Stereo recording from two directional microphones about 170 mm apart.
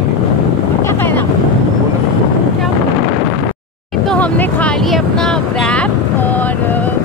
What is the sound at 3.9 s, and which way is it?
Vehicle, 5° left (ahead or behind).